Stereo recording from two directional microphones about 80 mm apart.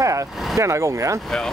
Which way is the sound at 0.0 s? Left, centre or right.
Right.